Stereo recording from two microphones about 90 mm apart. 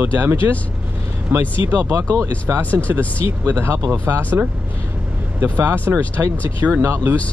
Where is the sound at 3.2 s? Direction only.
25° right (ahead or behind).